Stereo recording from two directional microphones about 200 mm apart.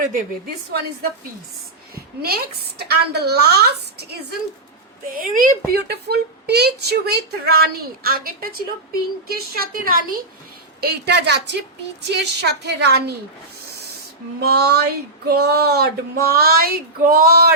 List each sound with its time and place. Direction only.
0.0 s a woman's voice: 45° right (ahead or behind)
2.2 s a woman's voice: 50° right (ahead or behind)
14.4 s a woman's voice: 50° right (ahead or behind)